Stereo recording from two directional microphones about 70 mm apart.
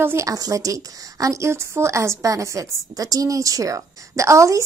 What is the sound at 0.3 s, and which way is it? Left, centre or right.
A woman's voice, right.